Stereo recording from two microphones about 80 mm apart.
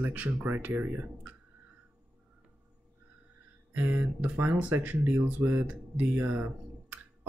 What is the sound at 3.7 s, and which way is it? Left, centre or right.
Speech, right.